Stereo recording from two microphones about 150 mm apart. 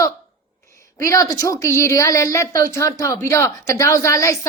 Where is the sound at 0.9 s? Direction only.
20° left (ahead or behind).